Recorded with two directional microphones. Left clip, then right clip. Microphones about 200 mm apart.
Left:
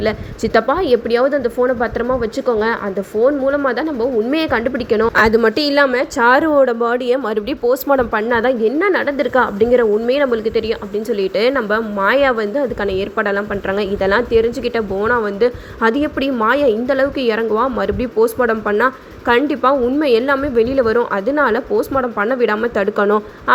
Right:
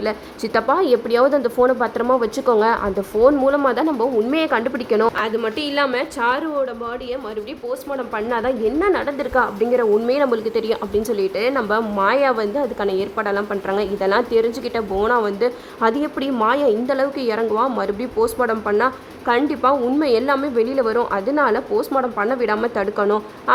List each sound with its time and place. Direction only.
0.0 s a woman's voice: 10° left (ahead or behind)
4.3 s a woman's voice: 10° left (ahead or behind)
5.1 s a woman's voice: 30° left (ahead or behind)
8.1 s a woman's voice: 20° left (ahead or behind)